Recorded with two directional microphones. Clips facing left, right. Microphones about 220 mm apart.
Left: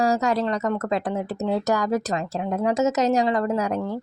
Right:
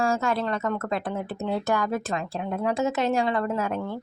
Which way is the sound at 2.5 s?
20° left (ahead or behind).